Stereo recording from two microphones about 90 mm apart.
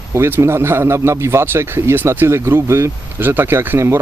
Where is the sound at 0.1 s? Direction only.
30° right (ahead or behind).